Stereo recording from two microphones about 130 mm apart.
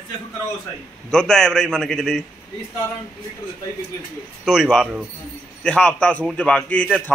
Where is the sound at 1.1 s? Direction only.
5° left (ahead or behind).